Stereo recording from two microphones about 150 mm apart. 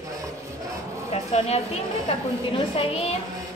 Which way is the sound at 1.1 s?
45° left (ahead or behind).